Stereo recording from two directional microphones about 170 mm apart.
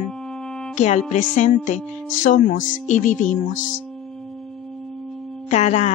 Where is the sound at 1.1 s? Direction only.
45° left (ahead or behind).